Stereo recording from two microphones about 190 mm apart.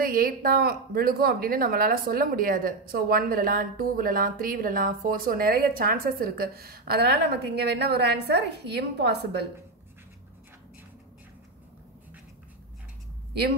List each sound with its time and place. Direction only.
0.0 s speech: 50° right (ahead or behind)